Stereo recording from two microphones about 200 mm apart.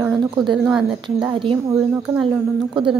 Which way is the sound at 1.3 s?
25° right (ahead or behind).